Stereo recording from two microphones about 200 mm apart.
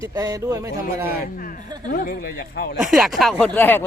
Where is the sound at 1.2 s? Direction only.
45° left (ahead or behind).